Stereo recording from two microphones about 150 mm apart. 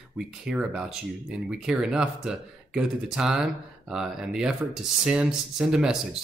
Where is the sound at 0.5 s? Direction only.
5° right (ahead or behind).